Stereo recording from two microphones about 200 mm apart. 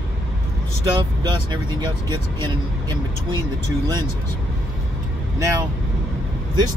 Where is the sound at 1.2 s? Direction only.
20° right (ahead or behind).